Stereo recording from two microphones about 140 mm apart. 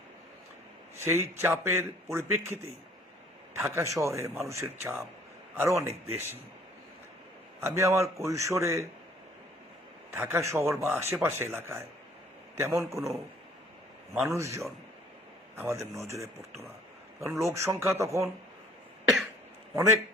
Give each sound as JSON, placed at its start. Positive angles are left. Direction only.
{"t": 0.9, "sound": "a man's voice", "side_deg": -20}
{"t": 7.6, "sound": "a man's voice", "side_deg": -20}
{"t": 10.1, "sound": "a man's voice", "side_deg": -15}
{"t": 14.1, "sound": "a man's voice", "side_deg": -20}
{"t": 19.7, "sound": "a man's voice", "side_deg": -20}